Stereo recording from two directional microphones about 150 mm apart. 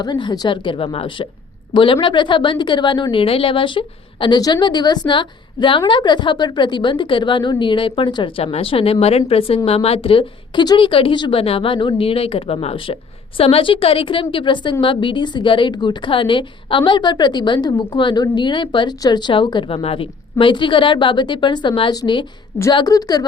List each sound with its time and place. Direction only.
0.0 s a woman's voice: 30° left (ahead or behind)